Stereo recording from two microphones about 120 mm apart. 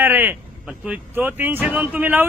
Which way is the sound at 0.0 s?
15° right (ahead or behind).